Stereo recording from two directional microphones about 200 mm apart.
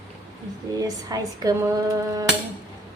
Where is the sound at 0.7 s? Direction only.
15° right (ahead or behind).